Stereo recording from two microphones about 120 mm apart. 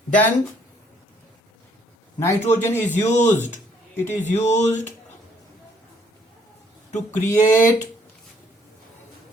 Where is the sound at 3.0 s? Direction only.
80° left.